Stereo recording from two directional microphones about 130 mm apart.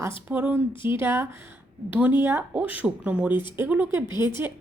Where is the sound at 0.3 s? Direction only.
15° right (ahead or behind).